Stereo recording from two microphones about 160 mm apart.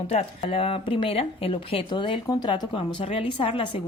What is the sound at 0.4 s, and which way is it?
A woman's voice, 35° left (ahead or behind).